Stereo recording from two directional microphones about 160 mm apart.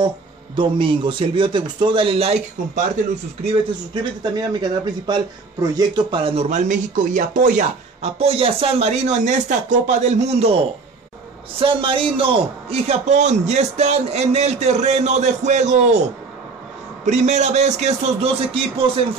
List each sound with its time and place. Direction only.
0.6 s speech: 30° right (ahead or behind)
3.9 s speech: 25° right (ahead or behind)
11.6 s a man's voice: 35° right (ahead or behind)
17.0 s a man's voice: 45° right (ahead or behind)